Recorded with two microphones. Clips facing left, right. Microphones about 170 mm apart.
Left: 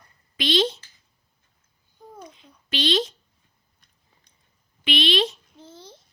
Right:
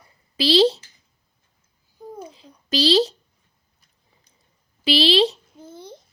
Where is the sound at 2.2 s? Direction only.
30° right (ahead or behind).